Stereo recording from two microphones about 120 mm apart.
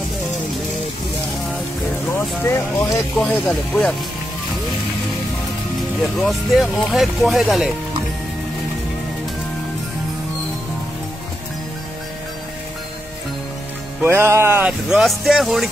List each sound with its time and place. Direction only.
2.1 s speech: 20° left (ahead or behind)
3.2 s speech: 15° left (ahead or behind)
6.2 s speech: centre (ahead or behind)
14.0 s music: 20° right (ahead or behind)
14.7 s speech: centre (ahead or behind)